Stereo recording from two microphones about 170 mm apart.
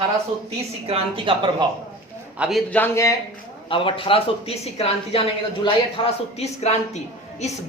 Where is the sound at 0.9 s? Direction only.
35° right (ahead or behind).